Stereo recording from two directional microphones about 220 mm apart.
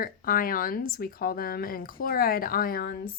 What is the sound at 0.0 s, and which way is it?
A woman's voice, 40° left (ahead or behind).